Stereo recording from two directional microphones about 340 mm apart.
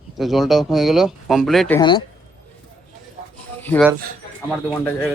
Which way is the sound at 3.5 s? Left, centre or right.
Centre.